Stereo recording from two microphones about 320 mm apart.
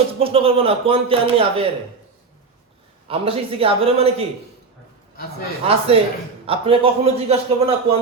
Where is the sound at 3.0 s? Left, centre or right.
Centre.